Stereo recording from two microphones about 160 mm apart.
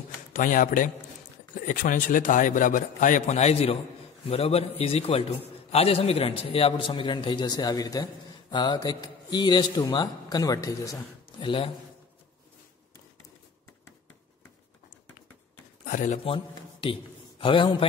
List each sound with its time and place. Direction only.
0.3 s a man's voice: 55° left (ahead or behind); by 11.7 s 30° left (ahead or behind)
15.8 s speech: 55° left (ahead or behind)
16.3 s a man's voice: 35° left (ahead or behind)